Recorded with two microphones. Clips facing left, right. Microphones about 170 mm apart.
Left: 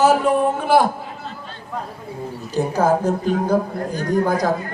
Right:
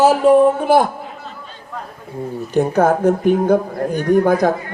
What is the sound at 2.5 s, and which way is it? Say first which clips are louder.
A man's voice: right 3 dB; 60° right (ahead or behind).